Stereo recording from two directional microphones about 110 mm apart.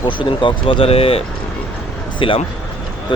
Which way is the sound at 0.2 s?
50° left (ahead or behind).